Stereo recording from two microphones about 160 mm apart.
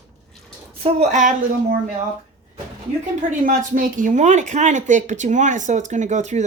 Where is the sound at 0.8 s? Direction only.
45° right (ahead or behind).